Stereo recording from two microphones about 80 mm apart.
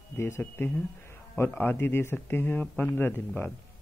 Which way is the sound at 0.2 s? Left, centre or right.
Left.